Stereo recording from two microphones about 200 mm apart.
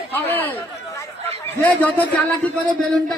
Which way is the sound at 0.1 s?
10° left (ahead or behind).